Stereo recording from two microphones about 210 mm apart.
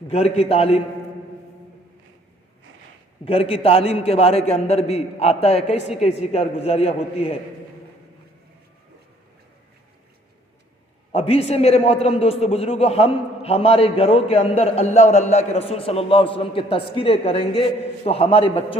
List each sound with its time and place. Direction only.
0.1 s a man's voice: 30° left (ahead or behind)
3.2 s a man's voice: 25° left (ahead or behind)
11.1 s a man's voice: 30° left (ahead or behind)